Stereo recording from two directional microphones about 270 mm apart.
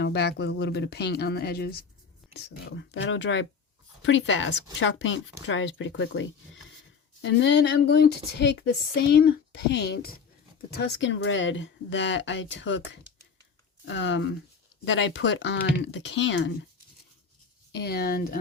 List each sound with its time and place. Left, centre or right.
0.0 s speech: left
17.7 s speech: left